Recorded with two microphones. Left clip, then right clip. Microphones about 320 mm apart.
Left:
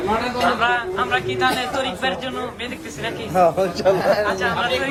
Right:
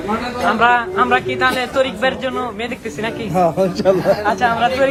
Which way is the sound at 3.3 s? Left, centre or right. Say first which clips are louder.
Even; right.